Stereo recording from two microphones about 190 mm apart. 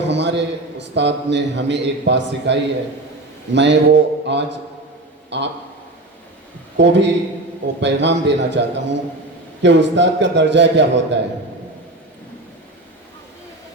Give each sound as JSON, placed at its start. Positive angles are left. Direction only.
{"t": 0.1, "sound": "a man's voice", "side_deg": -65}
{"t": 6.7, "sound": "a man's voice", "side_deg": -65}